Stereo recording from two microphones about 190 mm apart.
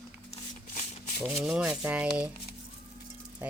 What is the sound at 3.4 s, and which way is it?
Rattle, 10° right (ahead or behind).